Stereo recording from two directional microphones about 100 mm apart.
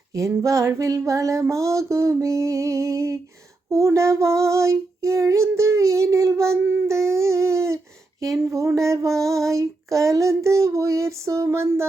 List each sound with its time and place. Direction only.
0.1 s child singing: 30° right (ahead or behind)